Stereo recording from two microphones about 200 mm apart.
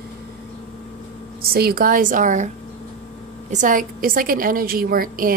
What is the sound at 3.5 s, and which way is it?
A woman's voice, 40° right (ahead or behind).